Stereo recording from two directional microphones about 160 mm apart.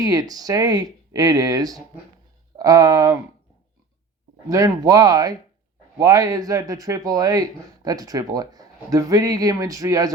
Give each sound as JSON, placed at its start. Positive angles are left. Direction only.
{"t": 0.0, "sound": "speech", "side_deg": -25}
{"t": 4.4, "sound": "speech", "side_deg": -25}